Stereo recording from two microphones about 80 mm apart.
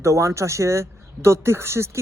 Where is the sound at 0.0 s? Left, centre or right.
Right.